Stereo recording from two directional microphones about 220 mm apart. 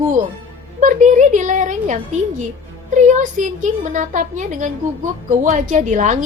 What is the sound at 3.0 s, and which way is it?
A woman's voice, 35° right (ahead or behind).